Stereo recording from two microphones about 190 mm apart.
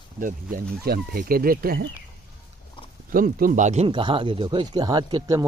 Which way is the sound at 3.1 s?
50° right (ahead or behind).